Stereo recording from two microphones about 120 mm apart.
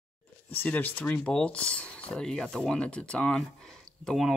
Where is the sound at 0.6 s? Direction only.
15° left (ahead or behind).